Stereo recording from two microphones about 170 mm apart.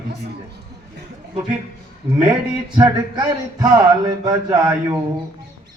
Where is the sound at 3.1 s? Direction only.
20° right (ahead or behind).